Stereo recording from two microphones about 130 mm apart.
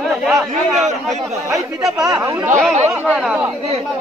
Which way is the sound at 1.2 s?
25° right (ahead or behind).